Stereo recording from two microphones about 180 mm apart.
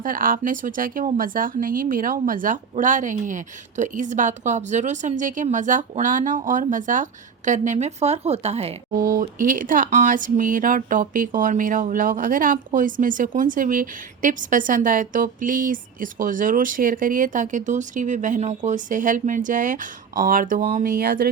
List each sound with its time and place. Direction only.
0.0 s speech: 50° right (ahead or behind)
9.0 s speech: 50° right (ahead or behind)